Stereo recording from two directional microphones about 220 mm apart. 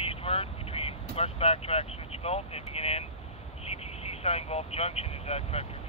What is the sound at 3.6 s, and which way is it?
Vehicle, 30° left (ahead or behind).